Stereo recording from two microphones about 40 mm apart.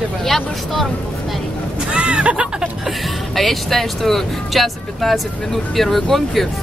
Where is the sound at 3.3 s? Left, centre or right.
Centre.